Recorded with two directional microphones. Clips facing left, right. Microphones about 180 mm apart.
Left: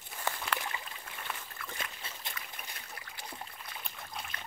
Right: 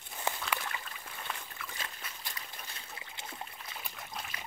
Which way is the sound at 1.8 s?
25° left (ahead or behind).